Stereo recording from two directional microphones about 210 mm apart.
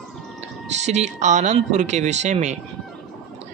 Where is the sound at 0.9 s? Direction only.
35° right (ahead or behind).